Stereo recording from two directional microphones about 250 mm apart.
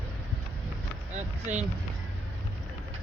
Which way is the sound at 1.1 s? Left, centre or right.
Right.